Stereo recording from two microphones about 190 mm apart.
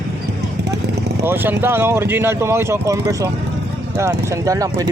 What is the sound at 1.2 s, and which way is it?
Speech, 10° right (ahead or behind).